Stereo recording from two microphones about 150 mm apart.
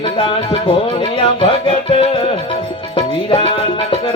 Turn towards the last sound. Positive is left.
turn(degrees=35)  # may be behind; listen again after turning